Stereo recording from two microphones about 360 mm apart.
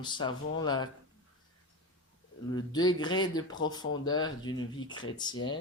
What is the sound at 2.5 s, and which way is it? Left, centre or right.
Speech, centre.